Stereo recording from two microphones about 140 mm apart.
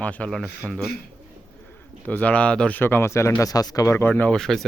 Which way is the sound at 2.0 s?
10° left (ahead or behind).